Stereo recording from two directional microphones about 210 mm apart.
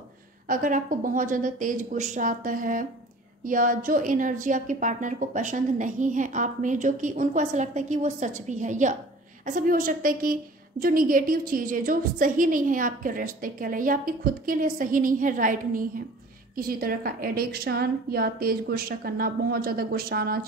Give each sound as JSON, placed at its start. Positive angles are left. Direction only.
{"t": 0.5, "sound": "a woman's voice", "side_deg": -40}